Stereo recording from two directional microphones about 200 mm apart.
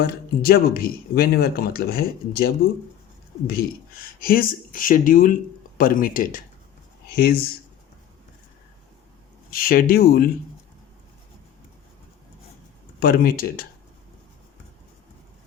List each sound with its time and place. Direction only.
0.0 s speech: 50° left (ahead or behind)
9.5 s speech: 45° left (ahead or behind)
13.0 s speech: 50° left (ahead or behind)